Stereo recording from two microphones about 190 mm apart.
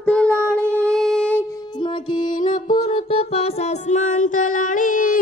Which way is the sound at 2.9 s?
30° left (ahead or behind).